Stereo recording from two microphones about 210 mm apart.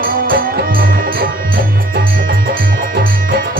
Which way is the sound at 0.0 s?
45° right (ahead or behind).